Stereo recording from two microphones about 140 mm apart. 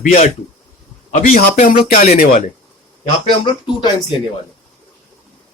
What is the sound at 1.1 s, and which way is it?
A man's voice, 60° left (ahead or behind).